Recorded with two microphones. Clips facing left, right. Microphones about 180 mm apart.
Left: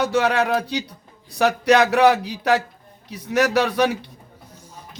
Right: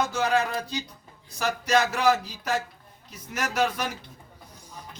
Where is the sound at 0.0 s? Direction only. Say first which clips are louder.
Left 5 dB; 70° left (ahead or behind).